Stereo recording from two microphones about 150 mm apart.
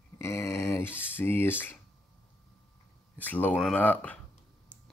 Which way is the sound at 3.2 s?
10° left (ahead or behind).